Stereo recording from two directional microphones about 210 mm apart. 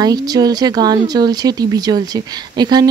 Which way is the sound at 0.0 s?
20° right (ahead or behind).